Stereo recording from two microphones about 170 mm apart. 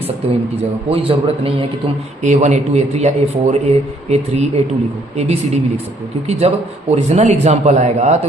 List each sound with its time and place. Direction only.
0.9 s a man's voice: 35° right (ahead or behind)